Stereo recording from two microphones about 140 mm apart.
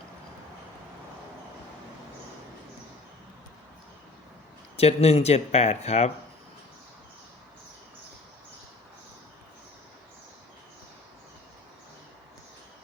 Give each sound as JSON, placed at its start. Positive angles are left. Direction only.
{"t": 4.8, "sound": "speech", "side_deg": 50}